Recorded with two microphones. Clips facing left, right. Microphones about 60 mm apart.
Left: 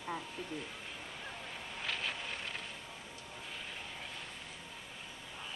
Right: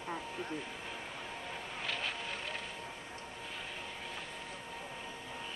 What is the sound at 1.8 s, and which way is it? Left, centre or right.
Vehicle, centre.